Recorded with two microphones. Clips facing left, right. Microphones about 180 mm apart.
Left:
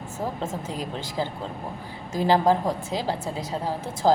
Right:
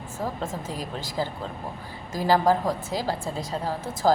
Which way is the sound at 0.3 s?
20° left (ahead or behind).